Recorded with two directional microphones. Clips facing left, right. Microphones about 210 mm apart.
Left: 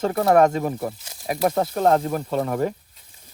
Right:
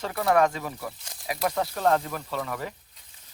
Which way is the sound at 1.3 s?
45° left (ahead or behind).